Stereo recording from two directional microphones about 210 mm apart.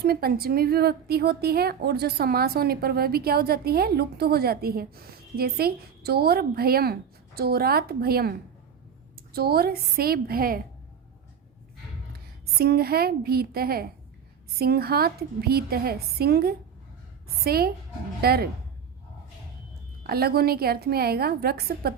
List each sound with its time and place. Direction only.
0.0 s a woman's voice: 45° right (ahead or behind)
12.5 s a woman's voice: 45° right (ahead or behind)
20.1 s a woman's voice: 45° right (ahead or behind)